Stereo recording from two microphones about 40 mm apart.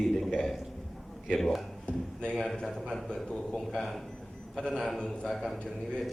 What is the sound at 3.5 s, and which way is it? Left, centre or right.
A man's voice, centre.